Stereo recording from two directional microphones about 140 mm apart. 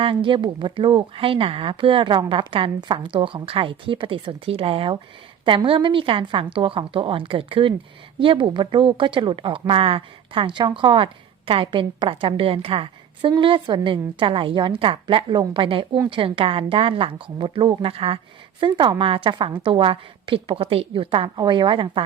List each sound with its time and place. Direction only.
0.0 s speech: 40° right (ahead or behind)